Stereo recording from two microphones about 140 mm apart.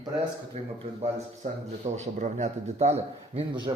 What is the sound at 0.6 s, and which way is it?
A man's voice, 55° right (ahead or behind).